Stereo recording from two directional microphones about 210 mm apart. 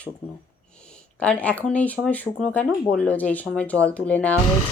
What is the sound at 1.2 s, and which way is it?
Speech, 5° left (ahead or behind).